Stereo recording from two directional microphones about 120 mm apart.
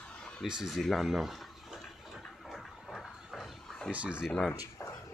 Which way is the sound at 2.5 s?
5° left (ahead or behind).